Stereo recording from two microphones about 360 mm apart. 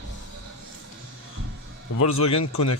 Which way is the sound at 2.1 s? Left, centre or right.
Left.